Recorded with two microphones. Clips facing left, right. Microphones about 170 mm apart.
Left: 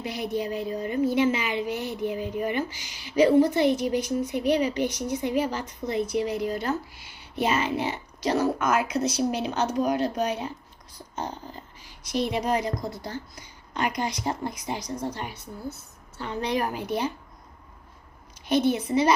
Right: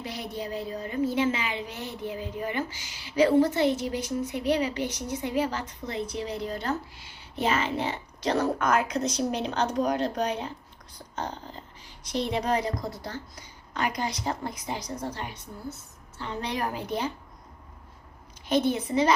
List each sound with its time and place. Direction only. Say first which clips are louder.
0.0 s a woman's voice: left 5 dB; 15° left (ahead or behind)
18.5 s a woman's voice: left 2 dB; 15° left (ahead or behind)